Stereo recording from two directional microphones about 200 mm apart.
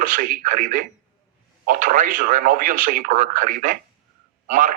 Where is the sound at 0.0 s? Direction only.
45° right (ahead or behind).